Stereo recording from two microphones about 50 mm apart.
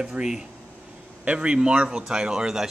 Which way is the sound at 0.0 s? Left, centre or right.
Right.